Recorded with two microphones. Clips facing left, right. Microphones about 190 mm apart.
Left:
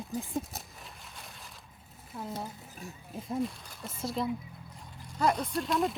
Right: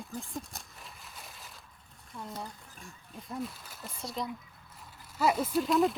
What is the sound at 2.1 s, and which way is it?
Speech, 5° left (ahead or behind).